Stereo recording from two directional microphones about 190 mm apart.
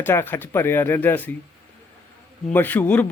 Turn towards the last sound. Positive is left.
turn(degrees=10)  # may be behind; listen again after turning